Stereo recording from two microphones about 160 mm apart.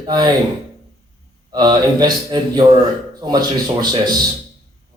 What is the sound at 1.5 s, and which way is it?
A man's voice, 25° right (ahead or behind).